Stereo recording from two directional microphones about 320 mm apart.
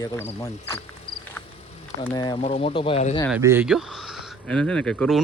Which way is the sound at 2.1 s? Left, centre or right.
Centre.